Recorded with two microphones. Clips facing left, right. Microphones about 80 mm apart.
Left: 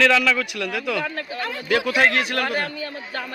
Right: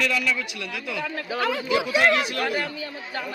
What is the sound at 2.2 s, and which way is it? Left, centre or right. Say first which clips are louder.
Speech: left 2 dB; left.